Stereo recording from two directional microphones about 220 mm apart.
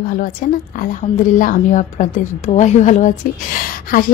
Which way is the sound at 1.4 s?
35° left (ahead or behind).